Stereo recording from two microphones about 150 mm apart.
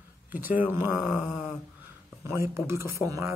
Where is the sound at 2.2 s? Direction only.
15° right (ahead or behind).